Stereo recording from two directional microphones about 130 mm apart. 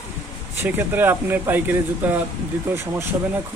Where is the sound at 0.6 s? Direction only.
15° right (ahead or behind).